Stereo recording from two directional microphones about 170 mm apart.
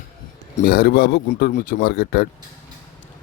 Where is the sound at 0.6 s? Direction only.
65° left (ahead or behind).